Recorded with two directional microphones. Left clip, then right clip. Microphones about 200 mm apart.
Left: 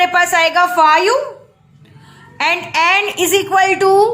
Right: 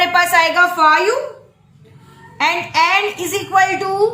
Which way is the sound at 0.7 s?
50° left (ahead or behind).